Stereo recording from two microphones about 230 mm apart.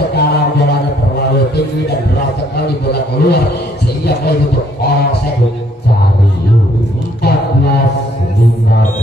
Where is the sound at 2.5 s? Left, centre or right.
Left.